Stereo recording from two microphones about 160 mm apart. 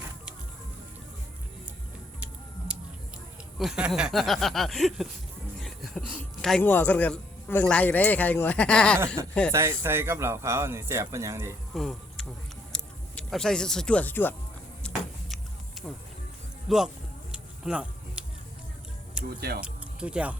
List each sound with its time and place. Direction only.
2.7 s a sound: 5° right (ahead or behind)
3.6 s speech: 5° right (ahead or behind)
5.5 s music: centre (ahead or behind)
6.4 s a man's voice: 5° left (ahead or behind)
9.5 s speech: 15° right (ahead or behind)
11.7 s a sound: centre (ahead or behind)
12.7 s speech: 5° left (ahead or behind)
14.8 s a sound: 5° left (ahead or behind)
16.6 s speech: centre (ahead or behind)
17.3 s music: 5° right (ahead or behind)
19.4 s speech: 80° right
19.6 s music: 5° right (ahead or behind)